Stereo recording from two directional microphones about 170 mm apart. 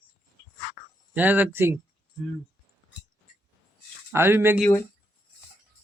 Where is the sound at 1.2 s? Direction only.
10° right (ahead or behind).